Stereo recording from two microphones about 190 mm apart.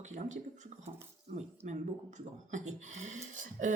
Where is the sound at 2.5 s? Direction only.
40° right (ahead or behind).